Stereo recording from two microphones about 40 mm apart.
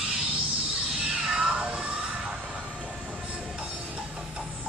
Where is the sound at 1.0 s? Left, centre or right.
Right.